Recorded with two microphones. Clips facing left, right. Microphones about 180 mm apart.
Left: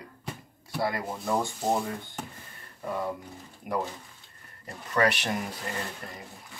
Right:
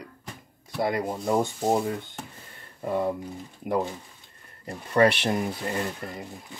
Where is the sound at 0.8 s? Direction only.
20° right (ahead or behind).